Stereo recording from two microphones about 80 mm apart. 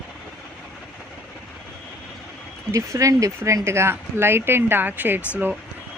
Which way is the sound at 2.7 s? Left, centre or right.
Right.